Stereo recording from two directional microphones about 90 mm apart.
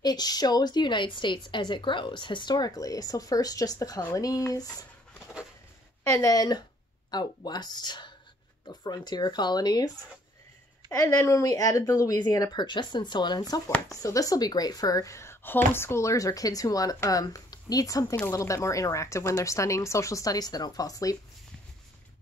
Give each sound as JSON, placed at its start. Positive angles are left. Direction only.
{"t": 0.0, "sound": "a woman's voice", "side_deg": 50}
{"t": 6.2, "sound": "a woman's voice", "side_deg": 45}
{"t": 10.9, "sound": "a woman's voice", "side_deg": 35}
{"t": 13.8, "sound": "a woman's voice", "side_deg": 40}